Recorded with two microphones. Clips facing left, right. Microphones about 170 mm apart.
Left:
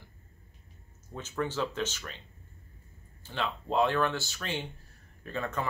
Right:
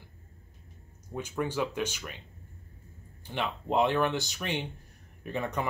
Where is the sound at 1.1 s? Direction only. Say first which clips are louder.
Right 1 dB; 15° right (ahead or behind).